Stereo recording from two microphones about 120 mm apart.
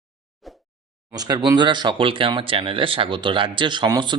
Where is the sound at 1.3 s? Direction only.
35° right (ahead or behind).